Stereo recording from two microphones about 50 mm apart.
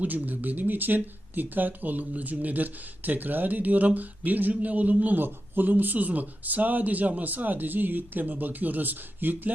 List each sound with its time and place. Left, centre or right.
0.0 s speech: right